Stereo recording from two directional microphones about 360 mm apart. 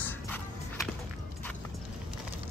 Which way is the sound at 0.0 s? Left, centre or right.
Centre.